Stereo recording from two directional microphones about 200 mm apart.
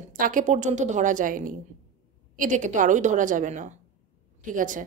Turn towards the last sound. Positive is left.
turn(degrees=-40)  # may be behind; listen again after turning